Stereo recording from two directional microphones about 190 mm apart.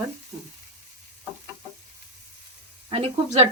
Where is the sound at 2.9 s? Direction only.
30° right (ahead or behind).